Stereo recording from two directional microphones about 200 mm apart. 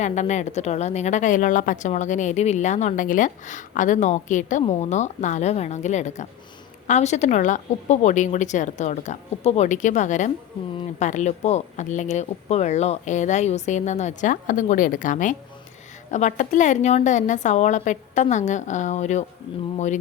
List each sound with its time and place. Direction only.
0.0 s a woman's voice: 35° left (ahead or behind)